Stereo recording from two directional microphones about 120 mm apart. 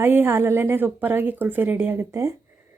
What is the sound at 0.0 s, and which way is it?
Speech, 15° right (ahead or behind).